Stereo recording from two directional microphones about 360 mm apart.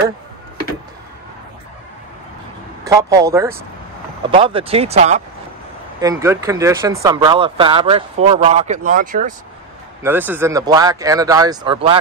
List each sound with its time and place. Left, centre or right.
2.8 s speech: centre
10.0 s speech: centre